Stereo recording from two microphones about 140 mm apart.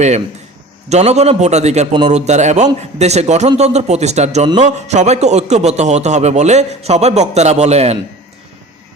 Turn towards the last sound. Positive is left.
turn(degrees=-50)  # may be behind; listen again after turning